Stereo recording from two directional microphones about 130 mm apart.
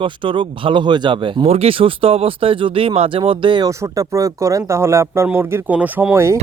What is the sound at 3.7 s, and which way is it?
Speech, 25° right (ahead or behind).